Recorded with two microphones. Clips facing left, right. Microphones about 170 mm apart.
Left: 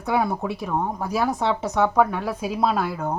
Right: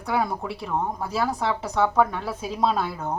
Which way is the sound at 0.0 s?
20° left (ahead or behind).